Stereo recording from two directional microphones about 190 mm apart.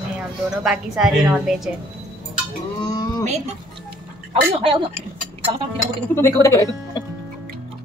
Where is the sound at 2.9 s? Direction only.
20° left (ahead or behind).